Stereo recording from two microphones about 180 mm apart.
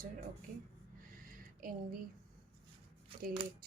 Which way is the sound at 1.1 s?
50° right (ahead or behind).